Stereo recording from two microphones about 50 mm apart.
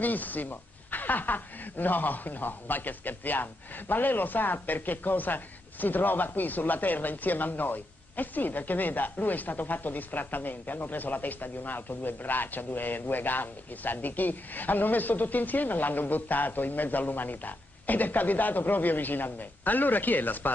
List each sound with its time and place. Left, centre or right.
0.0 s a woman's voice: left